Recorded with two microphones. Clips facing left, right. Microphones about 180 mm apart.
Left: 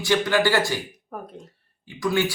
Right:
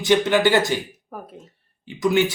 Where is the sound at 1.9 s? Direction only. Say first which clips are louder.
Right 4 dB; 20° right (ahead or behind).